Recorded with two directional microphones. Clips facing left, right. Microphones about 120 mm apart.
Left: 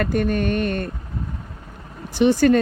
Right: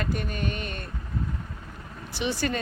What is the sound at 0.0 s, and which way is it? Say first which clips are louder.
Speech: left 10 dB; 50° left (ahead or behind).